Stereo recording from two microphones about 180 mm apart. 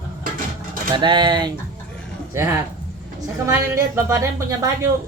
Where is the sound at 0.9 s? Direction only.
25° right (ahead or behind).